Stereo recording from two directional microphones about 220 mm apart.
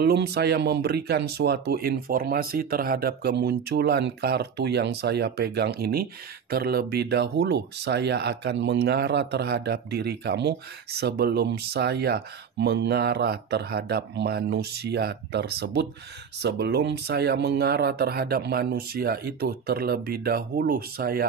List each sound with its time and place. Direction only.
0.0 s speech: 45° right (ahead or behind)